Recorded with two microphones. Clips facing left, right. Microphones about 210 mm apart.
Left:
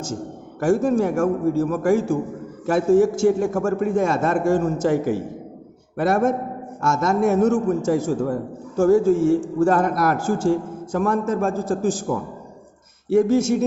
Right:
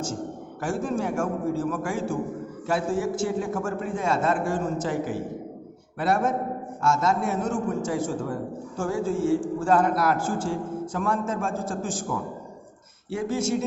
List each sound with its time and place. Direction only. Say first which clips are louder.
0.6 s a man's voice: left 9 dB; 45° left (ahead or behind)